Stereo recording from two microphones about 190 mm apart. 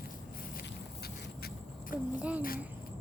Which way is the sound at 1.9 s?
50° left (ahead or behind).